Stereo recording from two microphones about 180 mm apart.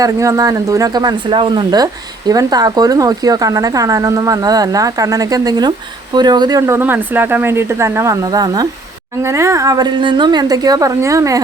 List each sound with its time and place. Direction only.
0.0 s speech: 20° right (ahead or behind)